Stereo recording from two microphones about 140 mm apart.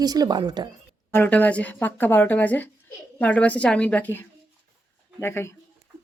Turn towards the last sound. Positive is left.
turn(degrees=15)  # may be behind; listen again after turning